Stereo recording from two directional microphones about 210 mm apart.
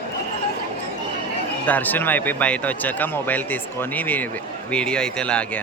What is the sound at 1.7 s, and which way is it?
A man's voice, 10° left (ahead or behind).